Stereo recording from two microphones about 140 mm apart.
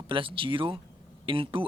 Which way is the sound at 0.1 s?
40° right (ahead or behind).